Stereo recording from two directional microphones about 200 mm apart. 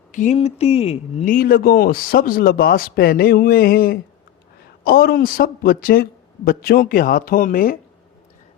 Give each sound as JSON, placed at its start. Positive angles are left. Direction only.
{"t": 0.1, "sound": "speech", "side_deg": 40}
{"t": 1.3, "sound": "speech", "side_deg": 45}